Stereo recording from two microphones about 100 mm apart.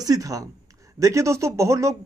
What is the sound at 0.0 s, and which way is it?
Speech, 35° right (ahead or behind).